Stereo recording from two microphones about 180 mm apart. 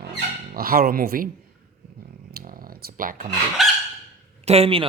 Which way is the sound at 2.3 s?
50° right (ahead or behind).